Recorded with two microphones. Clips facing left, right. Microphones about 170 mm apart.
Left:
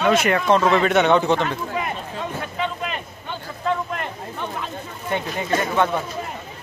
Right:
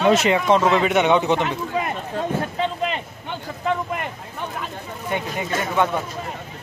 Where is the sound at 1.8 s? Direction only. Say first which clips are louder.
Right 3 dB; 35° right (ahead or behind).